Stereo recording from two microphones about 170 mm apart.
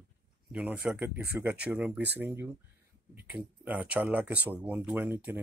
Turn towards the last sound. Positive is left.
turn(degrees=-10)  # may be behind; listen again after turning